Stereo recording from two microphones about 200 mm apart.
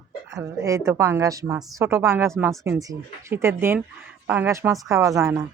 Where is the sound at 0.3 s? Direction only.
15° right (ahead or behind).